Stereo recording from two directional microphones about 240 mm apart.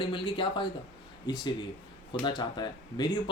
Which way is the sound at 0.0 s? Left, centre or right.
Centre.